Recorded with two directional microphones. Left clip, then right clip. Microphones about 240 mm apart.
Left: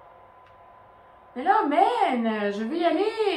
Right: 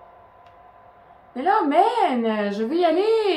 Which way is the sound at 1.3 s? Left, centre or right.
Right.